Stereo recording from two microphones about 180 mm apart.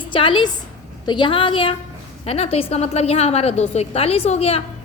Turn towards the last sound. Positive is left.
turn(degrees=35)  # may be behind; listen again after turning